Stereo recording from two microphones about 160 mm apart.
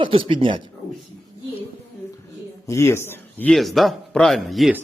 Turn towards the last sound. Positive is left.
turn(degrees=0)  # may be behind; listen again after turning